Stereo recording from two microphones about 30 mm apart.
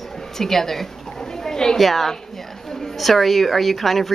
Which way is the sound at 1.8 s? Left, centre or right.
Centre.